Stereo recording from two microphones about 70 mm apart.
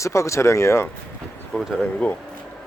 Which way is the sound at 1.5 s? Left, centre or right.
Centre.